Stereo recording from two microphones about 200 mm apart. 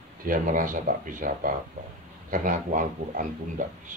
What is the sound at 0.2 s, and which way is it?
Speech, 45° right (ahead or behind).